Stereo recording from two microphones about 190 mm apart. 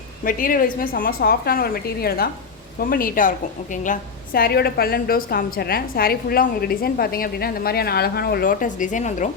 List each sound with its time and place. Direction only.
0.3 s a woman's voice: 45° left (ahead or behind)